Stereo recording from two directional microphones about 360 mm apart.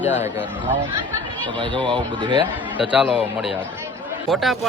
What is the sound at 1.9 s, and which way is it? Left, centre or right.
Speech, centre.